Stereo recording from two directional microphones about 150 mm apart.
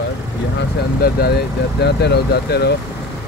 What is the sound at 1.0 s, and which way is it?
Speech, 90° left.